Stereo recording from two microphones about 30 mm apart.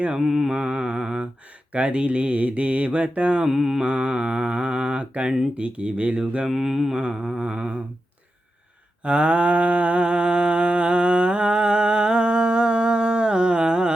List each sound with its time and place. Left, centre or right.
0.2 s mantra: centre
0.5 s mantra: right
0.9 s a sound: right
1.7 s mantra: right
3.5 s mantra: centre
3.8 s mantra: right
6.5 s mantra: centre
6.9 s mantra: right
9.0 s mantra: right